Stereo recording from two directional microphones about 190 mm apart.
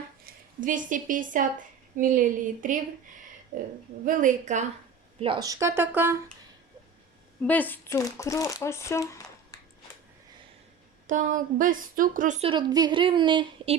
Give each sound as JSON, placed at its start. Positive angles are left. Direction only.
{"t": 0.3, "sound": "a woman's voice", "side_deg": -45}
{"t": 4.0, "sound": "a woman's voice", "side_deg": -40}
{"t": 5.2, "sound": "speech", "side_deg": -25}
{"t": 7.4, "sound": "speech", "side_deg": 10}
{"t": 11.0, "sound": "a woman's voice", "side_deg": -40}
{"t": 12.5, "sound": "speech", "side_deg": -20}